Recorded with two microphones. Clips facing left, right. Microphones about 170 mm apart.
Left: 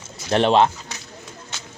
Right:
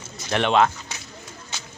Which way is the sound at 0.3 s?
30° left (ahead or behind).